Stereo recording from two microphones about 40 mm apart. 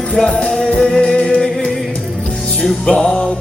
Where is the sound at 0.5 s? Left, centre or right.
Centre.